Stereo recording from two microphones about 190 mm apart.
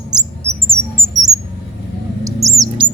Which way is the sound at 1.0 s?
20° right (ahead or behind).